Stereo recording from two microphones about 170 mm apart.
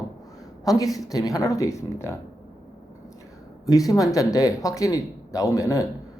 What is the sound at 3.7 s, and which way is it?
Speech, 20° left (ahead or behind).